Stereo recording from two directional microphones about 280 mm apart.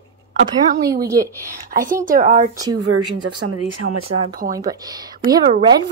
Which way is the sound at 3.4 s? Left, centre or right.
Right.